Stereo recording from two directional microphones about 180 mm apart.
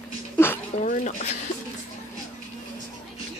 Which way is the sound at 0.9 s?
40° left (ahead or behind).